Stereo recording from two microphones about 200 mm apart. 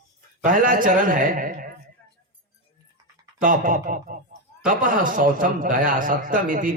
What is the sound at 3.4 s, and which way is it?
A man's voice, 40° right (ahead or behind).